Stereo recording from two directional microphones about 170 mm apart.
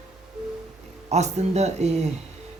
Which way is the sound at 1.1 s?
40° right (ahead or behind).